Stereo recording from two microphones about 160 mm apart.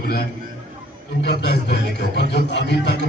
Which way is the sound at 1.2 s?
90° left.